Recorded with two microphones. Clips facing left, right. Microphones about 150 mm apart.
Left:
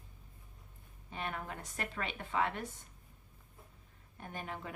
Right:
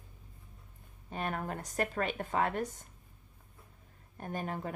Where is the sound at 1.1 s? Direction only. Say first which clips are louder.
Right 5 dB; 45° right (ahead or behind).